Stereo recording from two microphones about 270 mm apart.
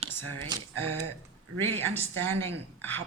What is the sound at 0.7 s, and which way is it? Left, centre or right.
Speech, right.